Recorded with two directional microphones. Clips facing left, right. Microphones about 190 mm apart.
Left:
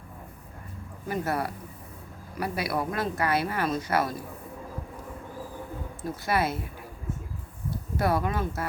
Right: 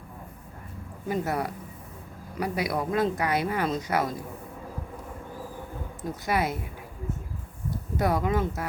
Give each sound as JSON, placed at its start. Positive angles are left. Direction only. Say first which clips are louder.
{"t": 1.0, "sound": "speech", "louder": "right 1 dB", "side_deg": -20}
{"t": 6.0, "sound": "speech", "louder": "even", "side_deg": -15}
{"t": 7.9, "sound": "speech", "louder": "right 1 dB", "side_deg": -20}